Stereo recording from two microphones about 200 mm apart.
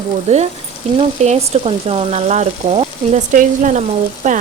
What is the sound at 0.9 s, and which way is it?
Speech, 30° right (ahead or behind).